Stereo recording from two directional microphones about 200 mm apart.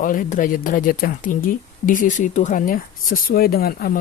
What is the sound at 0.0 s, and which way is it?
A woman's voice, 40° left (ahead or behind).